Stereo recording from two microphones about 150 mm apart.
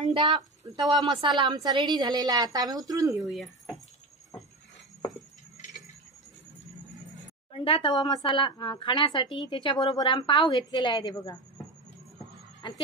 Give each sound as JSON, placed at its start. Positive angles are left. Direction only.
{"t": 0.0, "sound": "a woman's voice", "side_deg": -35}
{"t": 3.2, "sound": "speech", "side_deg": 0}
{"t": 7.5, "sound": "a woman's voice", "side_deg": 35}
{"t": 12.6, "sound": "a sound", "side_deg": 30}